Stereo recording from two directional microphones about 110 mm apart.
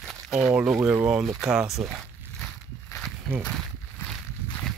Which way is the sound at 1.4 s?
5° right (ahead or behind).